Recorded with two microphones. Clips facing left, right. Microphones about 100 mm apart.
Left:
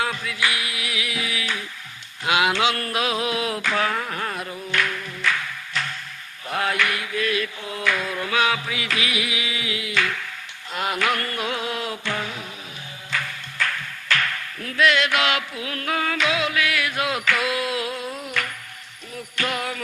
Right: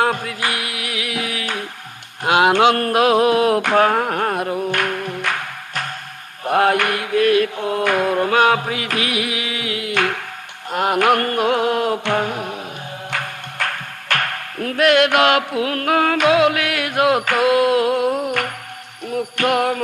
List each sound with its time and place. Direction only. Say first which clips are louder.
0.0 s music: right 6 dB; 50° right (ahead or behind)
2.2 s a sound: right 7 dB; 50° right (ahead or behind)
6.4 s mantra: right 8 dB; 55° right (ahead or behind)
10.7 s music: right 8 dB; 50° right (ahead or behind)